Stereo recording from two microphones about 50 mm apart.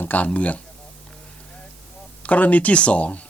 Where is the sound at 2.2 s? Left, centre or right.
Left.